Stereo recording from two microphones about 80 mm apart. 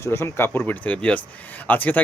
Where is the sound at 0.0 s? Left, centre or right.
Left.